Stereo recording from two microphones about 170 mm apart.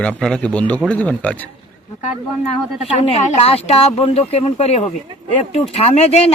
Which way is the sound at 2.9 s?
35° left (ahead or behind).